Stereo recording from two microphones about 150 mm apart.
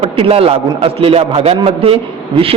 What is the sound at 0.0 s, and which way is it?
A man's voice, 40° right (ahead or behind).